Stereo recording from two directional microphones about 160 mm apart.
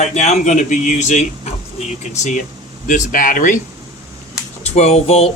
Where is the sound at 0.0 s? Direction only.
45° left (ahead or behind).